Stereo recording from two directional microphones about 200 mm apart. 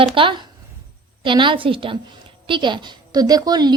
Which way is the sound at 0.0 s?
25° right (ahead or behind).